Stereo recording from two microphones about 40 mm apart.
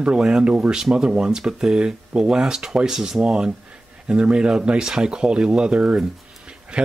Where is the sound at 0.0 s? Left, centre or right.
Right.